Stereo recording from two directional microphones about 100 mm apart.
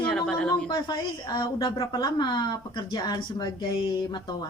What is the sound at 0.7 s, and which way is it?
A woman's voice, 50° left (ahead or behind).